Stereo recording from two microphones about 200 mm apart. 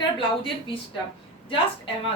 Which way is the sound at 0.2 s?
25° left (ahead or behind).